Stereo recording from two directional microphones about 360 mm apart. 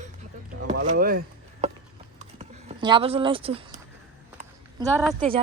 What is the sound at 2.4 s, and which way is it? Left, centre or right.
Speech, centre.